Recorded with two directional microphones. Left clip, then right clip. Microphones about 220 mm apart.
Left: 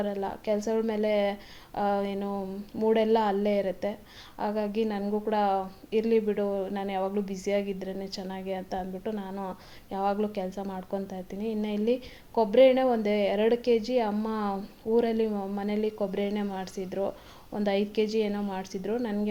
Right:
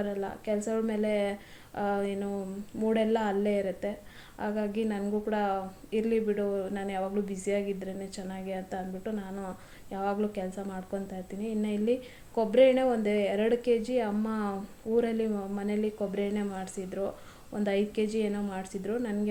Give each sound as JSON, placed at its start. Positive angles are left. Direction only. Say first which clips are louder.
{"t": 0.0, "sound": "a woman's voice", "louder": "left 3 dB", "side_deg": 30}